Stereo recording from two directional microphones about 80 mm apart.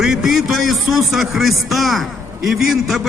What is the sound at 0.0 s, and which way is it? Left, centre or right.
A man's voice, centre.